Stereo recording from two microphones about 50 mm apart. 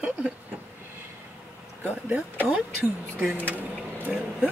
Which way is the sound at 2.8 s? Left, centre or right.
Right.